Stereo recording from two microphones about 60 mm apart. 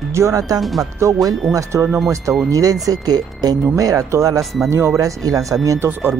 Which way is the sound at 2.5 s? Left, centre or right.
Right.